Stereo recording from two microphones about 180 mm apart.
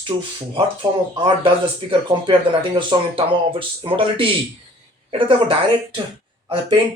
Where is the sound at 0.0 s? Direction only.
30° right (ahead or behind).